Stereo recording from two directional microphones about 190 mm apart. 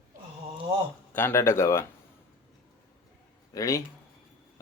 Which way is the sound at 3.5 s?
15° left (ahead or behind).